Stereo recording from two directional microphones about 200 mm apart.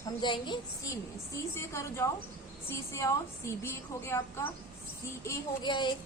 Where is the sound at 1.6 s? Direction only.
15° left (ahead or behind).